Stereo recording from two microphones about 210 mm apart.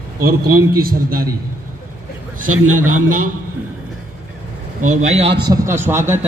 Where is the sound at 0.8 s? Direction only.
45° right (ahead or behind).